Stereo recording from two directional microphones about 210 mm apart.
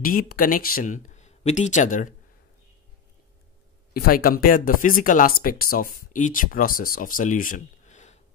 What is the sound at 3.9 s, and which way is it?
Speech, 45° left (ahead or behind).